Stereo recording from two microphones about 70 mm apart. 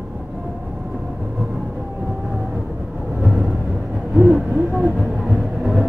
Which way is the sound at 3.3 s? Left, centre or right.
Centre.